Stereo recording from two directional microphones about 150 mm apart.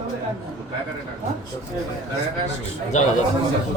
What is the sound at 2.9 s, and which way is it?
Speech, 55° left (ahead or behind).